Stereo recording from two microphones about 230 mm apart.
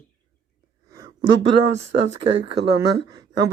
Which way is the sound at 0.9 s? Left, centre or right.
Centre.